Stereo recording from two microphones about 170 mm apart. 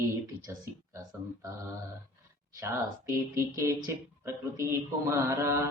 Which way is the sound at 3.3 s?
15° right (ahead or behind).